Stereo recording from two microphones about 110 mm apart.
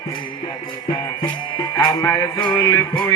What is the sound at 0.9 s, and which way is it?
Music, 35° left (ahead or behind).